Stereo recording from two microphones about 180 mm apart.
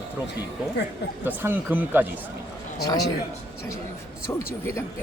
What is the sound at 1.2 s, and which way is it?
Speech, 10° right (ahead or behind).